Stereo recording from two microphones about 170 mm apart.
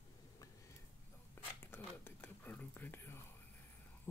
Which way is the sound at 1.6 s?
15° left (ahead or behind).